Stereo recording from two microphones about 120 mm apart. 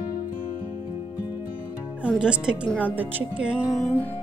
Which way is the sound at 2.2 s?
5° right (ahead or behind).